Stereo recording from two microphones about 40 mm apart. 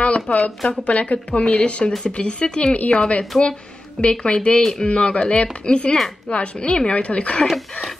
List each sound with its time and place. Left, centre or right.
0.0 s a woman's voice: left
4.6 s a man's voice: centre
4.8 s speech: left
7.4 s speech: centre